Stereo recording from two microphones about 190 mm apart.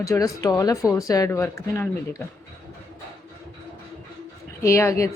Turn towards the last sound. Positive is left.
turn(degrees=15)  # may be behind; listen again after turning